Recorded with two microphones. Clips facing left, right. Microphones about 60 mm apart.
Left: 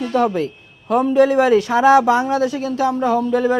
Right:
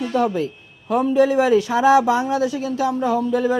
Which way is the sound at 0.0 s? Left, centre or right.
Left.